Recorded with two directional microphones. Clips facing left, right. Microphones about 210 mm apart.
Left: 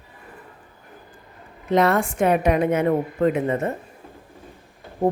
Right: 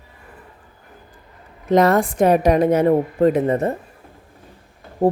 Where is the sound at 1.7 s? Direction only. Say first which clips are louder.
Right 4 dB; 40° right (ahead or behind).